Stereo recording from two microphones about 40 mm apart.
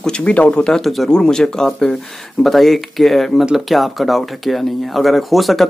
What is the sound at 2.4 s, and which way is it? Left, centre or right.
Speech, centre.